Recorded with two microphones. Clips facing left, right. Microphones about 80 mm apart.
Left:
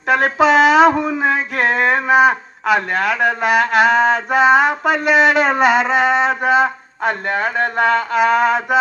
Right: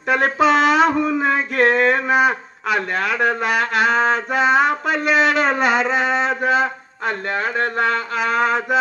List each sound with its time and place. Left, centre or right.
0.1 s speech: centre
0.9 s a sound: centre
8.1 s mantra: centre